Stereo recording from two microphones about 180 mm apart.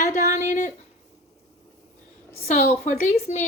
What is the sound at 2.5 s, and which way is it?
Speech, 40° left (ahead or behind).